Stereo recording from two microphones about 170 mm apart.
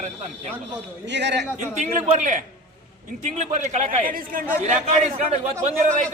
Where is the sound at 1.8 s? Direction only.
40° right (ahead or behind).